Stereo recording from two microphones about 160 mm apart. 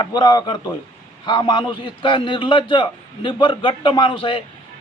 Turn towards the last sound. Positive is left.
turn(degrees=35)  # may be behind; listen again after turning